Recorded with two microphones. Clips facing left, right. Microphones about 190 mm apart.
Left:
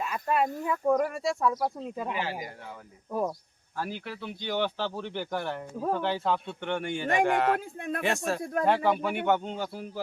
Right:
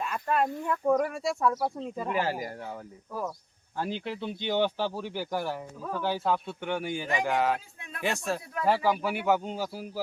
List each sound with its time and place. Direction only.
0.0 s a man's voice: 5° left (ahead or behind)
2.1 s speech: 45° right (ahead or behind)
3.1 s speech: 20° left (ahead or behind)
3.8 s a man's voice: 25° right (ahead or behind); by 7.6 s centre (ahead or behind)
7.8 s speech: 55° left (ahead or behind)
8.0 s a man's voice: centre (ahead or behind)